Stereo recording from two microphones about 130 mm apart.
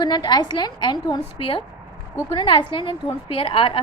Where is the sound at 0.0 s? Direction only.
35° left (ahead or behind).